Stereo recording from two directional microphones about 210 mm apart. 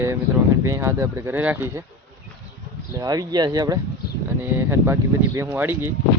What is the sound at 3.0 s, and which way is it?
Speech, 20° right (ahead or behind).